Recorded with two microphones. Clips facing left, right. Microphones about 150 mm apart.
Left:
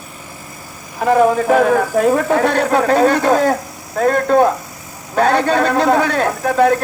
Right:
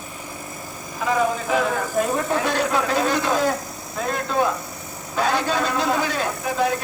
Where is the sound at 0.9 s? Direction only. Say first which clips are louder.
Left 9 dB; 60° left (ahead or behind).